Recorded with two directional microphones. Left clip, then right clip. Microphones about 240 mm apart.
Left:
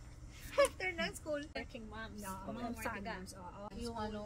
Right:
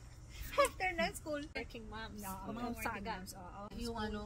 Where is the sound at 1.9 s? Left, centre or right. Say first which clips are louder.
Even; centre.